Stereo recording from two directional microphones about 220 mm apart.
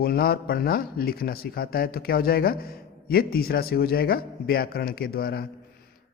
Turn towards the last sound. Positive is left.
turn(degrees=45)  # may be behind; listen again after turning